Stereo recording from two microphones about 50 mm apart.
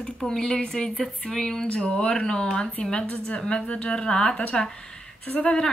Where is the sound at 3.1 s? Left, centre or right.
Left.